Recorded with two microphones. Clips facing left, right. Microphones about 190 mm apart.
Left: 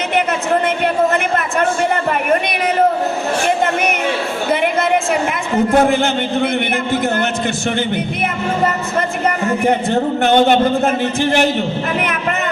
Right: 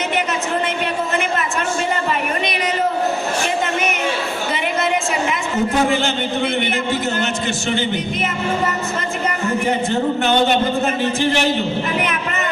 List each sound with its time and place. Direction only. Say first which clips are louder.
5.7 s a man's voice: left 6 dB; 55° left (ahead or behind)
9.6 s a man's voice: left 4 dB; 55° left (ahead or behind)